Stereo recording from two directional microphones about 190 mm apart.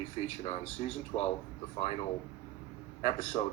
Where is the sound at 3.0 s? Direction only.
35° left (ahead or behind).